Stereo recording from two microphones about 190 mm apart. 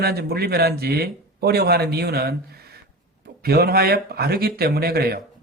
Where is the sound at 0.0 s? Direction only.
55° right (ahead or behind).